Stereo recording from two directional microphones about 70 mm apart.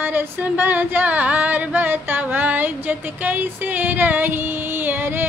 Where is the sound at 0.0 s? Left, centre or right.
Right.